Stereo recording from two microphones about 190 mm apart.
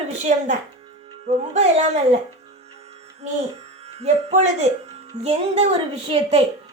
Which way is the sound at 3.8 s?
35° right (ahead or behind).